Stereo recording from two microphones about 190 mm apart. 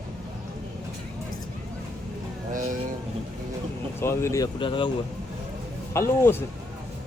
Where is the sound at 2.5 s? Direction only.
45° right (ahead or behind).